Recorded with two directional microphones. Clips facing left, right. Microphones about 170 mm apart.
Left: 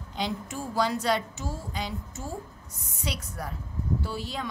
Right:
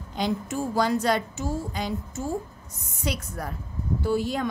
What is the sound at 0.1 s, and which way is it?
A woman's voice, 45° right (ahead or behind).